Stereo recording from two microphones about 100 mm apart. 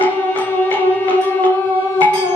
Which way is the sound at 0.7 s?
15° left (ahead or behind).